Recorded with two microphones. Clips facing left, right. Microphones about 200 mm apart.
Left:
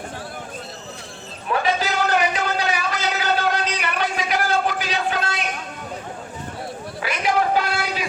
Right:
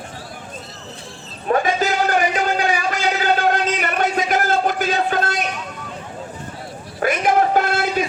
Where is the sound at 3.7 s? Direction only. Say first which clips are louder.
Right 4 dB; 45° right (ahead or behind).